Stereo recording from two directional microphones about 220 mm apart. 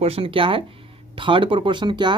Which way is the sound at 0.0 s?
25° right (ahead or behind).